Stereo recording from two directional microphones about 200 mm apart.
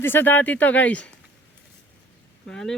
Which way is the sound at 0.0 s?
10° left (ahead or behind).